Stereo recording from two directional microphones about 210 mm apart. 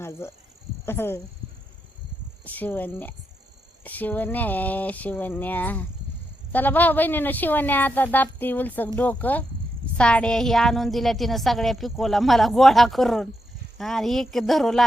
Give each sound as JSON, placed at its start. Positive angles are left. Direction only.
{"t": 0.0, "sound": "a woman's voice", "side_deg": 10}
{"t": 2.4, "sound": "a woman's voice", "side_deg": 10}